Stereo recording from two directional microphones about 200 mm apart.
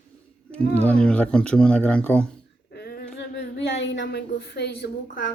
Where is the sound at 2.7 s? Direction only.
50° left (ahead or behind).